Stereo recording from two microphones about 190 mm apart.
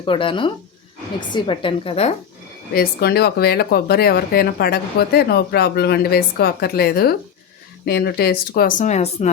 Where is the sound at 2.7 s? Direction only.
55° left (ahead or behind).